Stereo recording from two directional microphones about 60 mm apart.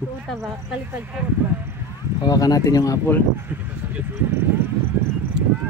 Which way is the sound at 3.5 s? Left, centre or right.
Right.